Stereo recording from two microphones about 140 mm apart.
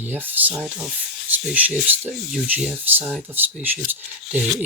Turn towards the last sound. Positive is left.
turn(degrees=-15)  # may be behind; listen again after turning